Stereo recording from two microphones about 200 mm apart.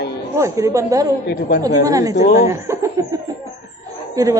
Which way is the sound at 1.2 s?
55° left (ahead or behind).